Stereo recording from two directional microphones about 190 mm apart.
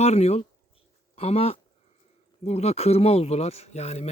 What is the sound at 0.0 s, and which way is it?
Speech, 35° left (ahead or behind).